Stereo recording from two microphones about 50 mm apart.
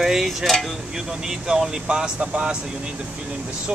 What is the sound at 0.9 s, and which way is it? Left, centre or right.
Speech, centre.